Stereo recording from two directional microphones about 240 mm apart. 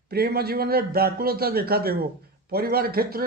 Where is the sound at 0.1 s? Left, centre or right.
Right.